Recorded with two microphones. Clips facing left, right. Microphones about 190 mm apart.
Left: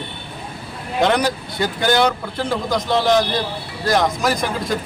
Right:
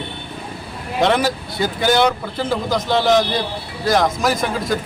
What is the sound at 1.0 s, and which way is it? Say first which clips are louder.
Speech: right 1 dB; centre (ahead or behind).